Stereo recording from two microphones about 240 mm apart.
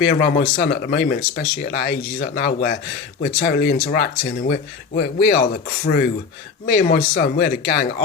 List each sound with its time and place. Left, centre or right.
0.0 s speech: left